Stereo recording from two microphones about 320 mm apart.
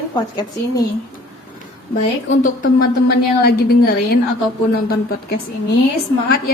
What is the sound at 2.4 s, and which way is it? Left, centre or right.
A woman's voice, left.